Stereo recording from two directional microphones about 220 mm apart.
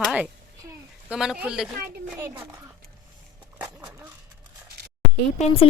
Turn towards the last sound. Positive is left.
turn(degrees=25)  # may be behind; listen again after turning